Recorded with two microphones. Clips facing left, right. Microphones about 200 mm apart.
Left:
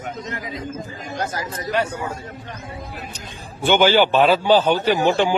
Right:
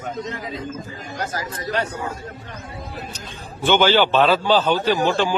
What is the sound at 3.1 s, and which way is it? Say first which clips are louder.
A man's voice: even; 15° left (ahead or behind).